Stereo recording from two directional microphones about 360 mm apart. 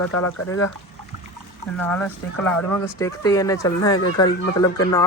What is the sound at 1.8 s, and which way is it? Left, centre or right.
Speech, centre.